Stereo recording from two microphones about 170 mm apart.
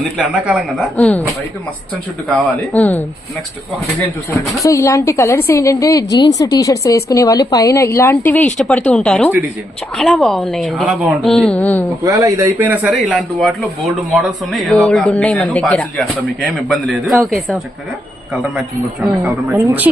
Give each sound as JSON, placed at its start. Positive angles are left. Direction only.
{"t": 0.9, "sound": "a woman's voice", "side_deg": 5}
{"t": 2.3, "sound": "a woman's voice", "side_deg": 5}
{"t": 4.3, "sound": "a woman's voice", "side_deg": 15}
{"t": 12.0, "sound": "speech", "side_deg": -20}
{"t": 12.9, "sound": "a man's voice", "side_deg": 0}
{"t": 19.2, "sound": "a woman's voice", "side_deg": -10}